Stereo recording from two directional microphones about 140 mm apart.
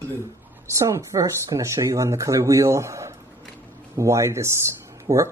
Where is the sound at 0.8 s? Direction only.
20° right (ahead or behind).